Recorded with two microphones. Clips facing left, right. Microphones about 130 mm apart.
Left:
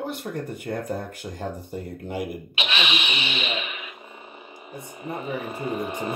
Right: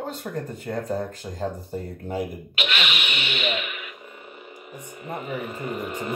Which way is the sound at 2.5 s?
20° left (ahead or behind).